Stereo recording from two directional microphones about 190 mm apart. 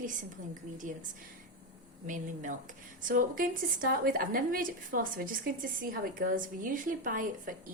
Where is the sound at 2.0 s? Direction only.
40° right (ahead or behind).